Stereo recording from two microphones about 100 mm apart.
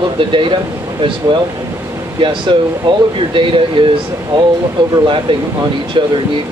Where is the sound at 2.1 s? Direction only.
55° right (ahead or behind).